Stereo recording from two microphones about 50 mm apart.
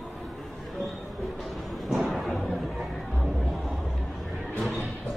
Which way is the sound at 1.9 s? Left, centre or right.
Centre.